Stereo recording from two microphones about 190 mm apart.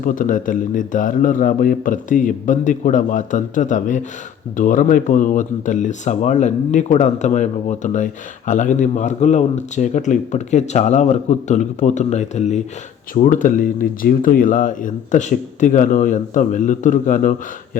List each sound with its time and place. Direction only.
0.0 s speech: 45° left (ahead or behind)